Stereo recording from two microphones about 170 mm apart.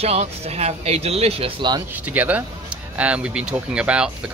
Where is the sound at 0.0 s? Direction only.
35° right (ahead or behind).